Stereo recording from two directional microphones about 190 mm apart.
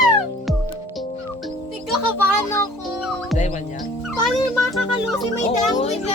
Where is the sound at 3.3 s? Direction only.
40° left (ahead or behind).